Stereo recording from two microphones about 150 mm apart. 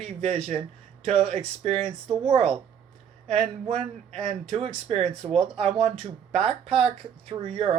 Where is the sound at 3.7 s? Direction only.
45° right (ahead or behind).